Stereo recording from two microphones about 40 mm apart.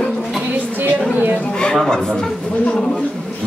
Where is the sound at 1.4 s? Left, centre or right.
Left.